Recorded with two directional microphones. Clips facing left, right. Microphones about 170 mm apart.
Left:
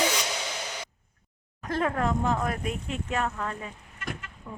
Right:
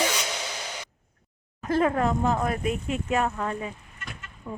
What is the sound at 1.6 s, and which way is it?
Speech, 5° right (ahead or behind).